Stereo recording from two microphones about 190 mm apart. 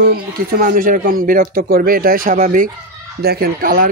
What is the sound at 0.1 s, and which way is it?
Speech, 50° right (ahead or behind).